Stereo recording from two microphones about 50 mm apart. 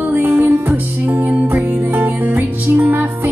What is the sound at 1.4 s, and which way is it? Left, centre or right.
Music, right.